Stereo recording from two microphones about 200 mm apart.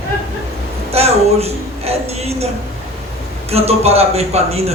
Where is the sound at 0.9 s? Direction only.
30° right (ahead or behind).